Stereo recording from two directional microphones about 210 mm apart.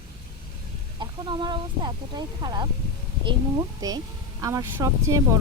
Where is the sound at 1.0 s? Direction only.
20° right (ahead or behind).